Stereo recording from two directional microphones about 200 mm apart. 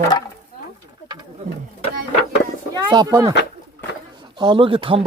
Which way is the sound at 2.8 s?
20° right (ahead or behind).